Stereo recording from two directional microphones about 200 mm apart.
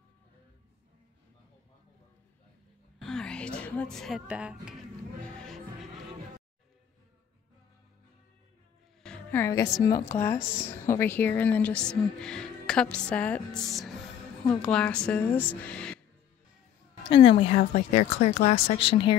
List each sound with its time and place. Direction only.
3.0 s music: 5° left (ahead or behind)
9.0 s a woman's voice: 5° left (ahead or behind)
17.4 s speech: 30° left (ahead or behind)